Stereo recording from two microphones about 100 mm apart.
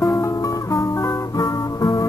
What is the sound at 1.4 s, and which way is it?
Music, 30° left (ahead or behind).